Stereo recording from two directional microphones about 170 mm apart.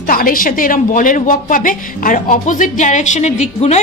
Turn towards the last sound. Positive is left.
turn(degrees=40)  # may be behind; listen again after turning